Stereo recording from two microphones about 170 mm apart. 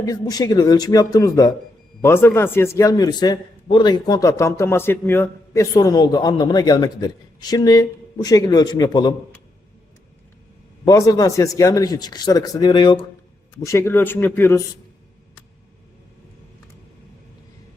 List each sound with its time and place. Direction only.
0.0 s a man's voice: 20° left (ahead or behind)
10.8 s a man's voice: 20° left (ahead or behind)
13.6 s speech: 15° left (ahead or behind)